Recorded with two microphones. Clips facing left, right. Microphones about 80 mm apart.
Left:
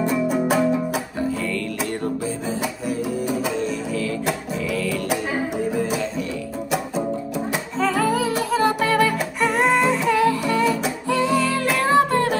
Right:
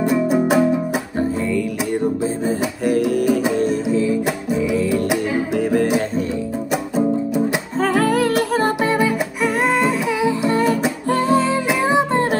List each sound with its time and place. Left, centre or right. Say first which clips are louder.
0.0 s music: right 4 dB; centre
2.9 s music: right 9 dB; right
3.9 s music: right 6 dB; centre
5.6 s music: right 7 dB; right
6.7 s music: right 5 dB; centre
7.8 s music: right 3 dB; right
8.8 s music: right 1 dB; centre
9.4 s music: even; centre
10.1 s humming: even; centre
10.5 s music: right 3 dB; right
11.4 s music: right 2 dB; centre